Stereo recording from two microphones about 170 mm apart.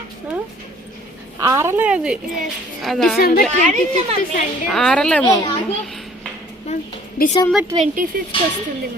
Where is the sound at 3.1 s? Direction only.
65° left (ahead or behind).